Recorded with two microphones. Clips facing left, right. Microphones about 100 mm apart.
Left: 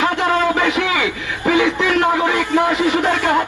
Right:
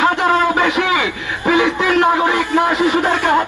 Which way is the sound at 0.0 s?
25° right (ahead or behind).